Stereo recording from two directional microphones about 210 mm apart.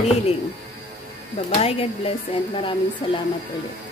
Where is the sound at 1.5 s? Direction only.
30° left (ahead or behind).